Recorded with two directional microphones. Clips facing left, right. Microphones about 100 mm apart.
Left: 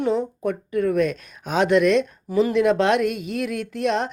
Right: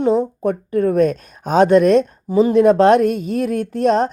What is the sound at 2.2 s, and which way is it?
A woman's voice, 30° right (ahead or behind).